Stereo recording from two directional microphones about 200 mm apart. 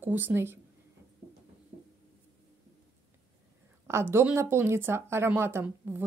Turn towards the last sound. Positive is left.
turn(degrees=-10)  # may be behind; listen again after turning